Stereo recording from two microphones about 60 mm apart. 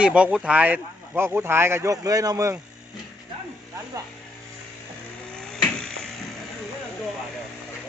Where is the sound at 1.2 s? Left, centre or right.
Right.